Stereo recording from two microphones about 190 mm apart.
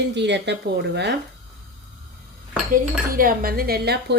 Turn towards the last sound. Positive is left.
turn(degrees=-55)  # may be behind; listen again after turning